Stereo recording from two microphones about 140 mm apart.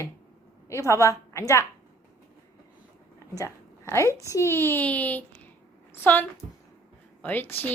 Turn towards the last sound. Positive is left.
turn(degrees=15)  # may be behind; listen again after turning